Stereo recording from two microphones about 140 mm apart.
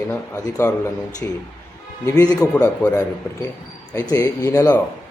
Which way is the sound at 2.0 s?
25° left (ahead or behind).